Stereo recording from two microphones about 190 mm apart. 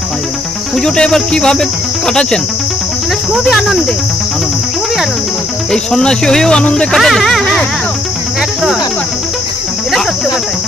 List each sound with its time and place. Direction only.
0.8 s speech: 5° left (ahead or behind)
5.7 s speech: 5° left (ahead or behind)